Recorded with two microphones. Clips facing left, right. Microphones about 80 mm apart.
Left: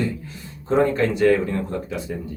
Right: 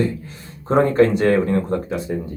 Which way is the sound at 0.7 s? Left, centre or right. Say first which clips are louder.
Right 4 dB; right.